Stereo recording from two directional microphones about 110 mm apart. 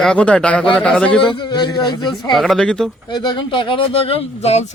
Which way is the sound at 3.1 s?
40° left (ahead or behind).